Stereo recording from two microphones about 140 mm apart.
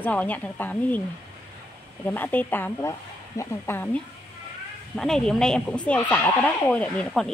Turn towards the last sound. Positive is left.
turn(degrees=5)  # may be behind; listen again after turning